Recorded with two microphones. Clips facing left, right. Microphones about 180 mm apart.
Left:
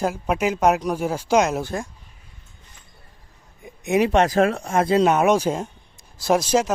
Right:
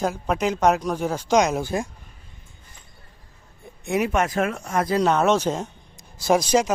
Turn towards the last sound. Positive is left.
turn(degrees=0)  # may be behind; listen again after turning